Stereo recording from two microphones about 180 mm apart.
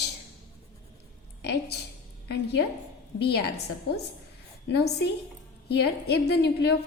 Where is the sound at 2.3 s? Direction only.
70° left (ahead or behind).